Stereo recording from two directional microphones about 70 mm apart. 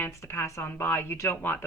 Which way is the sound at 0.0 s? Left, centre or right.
Left.